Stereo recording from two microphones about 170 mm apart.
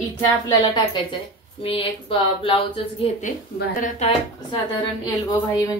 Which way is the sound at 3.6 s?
70° left (ahead or behind).